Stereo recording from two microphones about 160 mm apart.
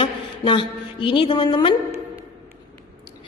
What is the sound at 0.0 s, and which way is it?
A woman's voice, 30° left (ahead or behind).